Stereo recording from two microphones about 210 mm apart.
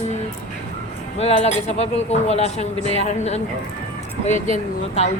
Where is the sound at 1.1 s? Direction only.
30° left (ahead or behind).